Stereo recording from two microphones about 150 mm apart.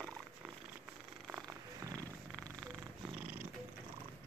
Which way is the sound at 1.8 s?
20° right (ahead or behind).